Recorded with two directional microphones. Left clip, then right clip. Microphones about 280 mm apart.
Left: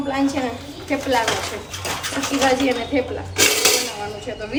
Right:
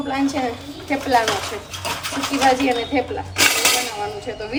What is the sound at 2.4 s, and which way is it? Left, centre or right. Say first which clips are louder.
Speech: right 2 dB; centre.